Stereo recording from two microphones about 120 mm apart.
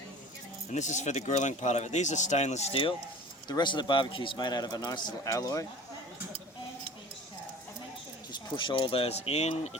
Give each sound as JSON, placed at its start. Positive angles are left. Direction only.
{"t": 0.7, "sound": "speech", "side_deg": 90}
{"t": 3.5, "sound": "a man's voice", "side_deg": 40}
{"t": 8.3, "sound": "speech", "side_deg": 40}